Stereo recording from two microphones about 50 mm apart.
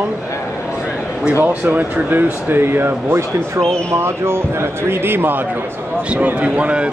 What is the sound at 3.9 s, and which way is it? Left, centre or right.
A man's voice, right.